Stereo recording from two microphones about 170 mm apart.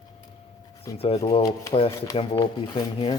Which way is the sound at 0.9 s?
20° left (ahead or behind).